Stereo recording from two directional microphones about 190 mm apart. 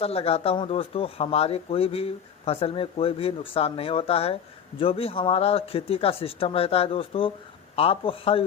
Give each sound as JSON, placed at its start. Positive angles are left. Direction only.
{"t": 0.0, "sound": "a man's voice", "side_deg": 30}